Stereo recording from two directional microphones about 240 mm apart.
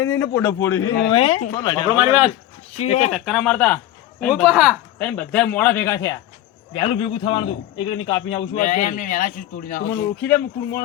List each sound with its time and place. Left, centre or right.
0.0 s a man's voice: centre
3.1 s a man's voice: centre
8.5 s a man's voice: left
10.2 s speech: centre